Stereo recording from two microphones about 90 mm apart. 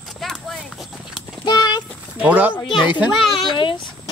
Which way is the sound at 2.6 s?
65° left (ahead or behind).